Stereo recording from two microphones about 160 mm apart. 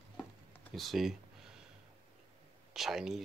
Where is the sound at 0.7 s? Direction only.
Centre (ahead or behind).